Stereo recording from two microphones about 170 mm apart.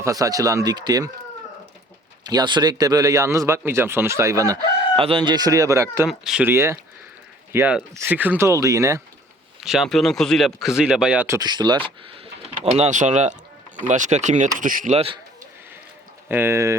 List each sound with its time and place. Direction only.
0.0 s speech: 20° right (ahead or behind)
2.2 s speech: 25° right (ahead or behind)
4.9 s speech: 30° right (ahead or behind)
6.1 s speech: 5° right (ahead or behind); by 9.0 s 20° right (ahead or behind)
9.6 s speech: 5° right (ahead or behind)
11.3 s speech: 25° right (ahead or behind); by 14.9 s 50° right (ahead or behind)
14.9 s a man's voice: 35° right (ahead or behind)
16.3 s speech: 15° right (ahead or behind)